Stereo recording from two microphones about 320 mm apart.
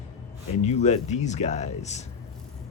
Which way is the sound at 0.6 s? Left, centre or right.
Left.